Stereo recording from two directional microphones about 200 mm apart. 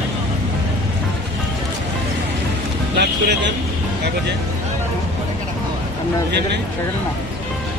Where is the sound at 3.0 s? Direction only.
55° right (ahead or behind).